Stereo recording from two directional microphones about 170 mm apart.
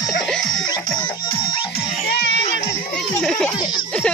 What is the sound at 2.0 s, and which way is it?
Music, 90° left.